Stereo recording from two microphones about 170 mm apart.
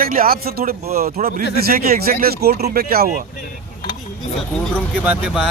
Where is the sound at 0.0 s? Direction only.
60° right (ahead or behind).